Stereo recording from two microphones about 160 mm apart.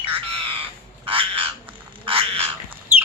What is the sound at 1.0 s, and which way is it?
Frog, 35° right (ahead or behind).